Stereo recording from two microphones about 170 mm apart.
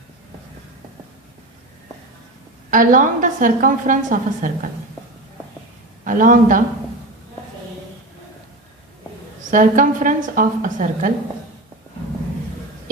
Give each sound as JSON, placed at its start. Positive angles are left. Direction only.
{"t": 2.6, "sound": "a woman's voice", "side_deg": -50}
{"t": 6.1, "sound": "a woman's voice", "side_deg": -50}
{"t": 9.5, "sound": "a woman's voice", "side_deg": -50}